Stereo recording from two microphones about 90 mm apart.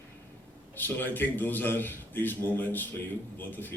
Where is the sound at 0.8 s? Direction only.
20° left (ahead or behind).